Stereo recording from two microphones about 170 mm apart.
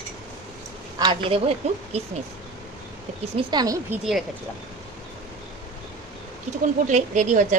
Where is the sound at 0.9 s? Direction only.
25° right (ahead or behind).